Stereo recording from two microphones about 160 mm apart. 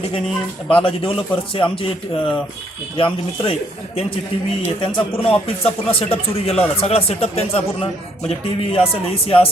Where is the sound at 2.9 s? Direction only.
35° left (ahead or behind).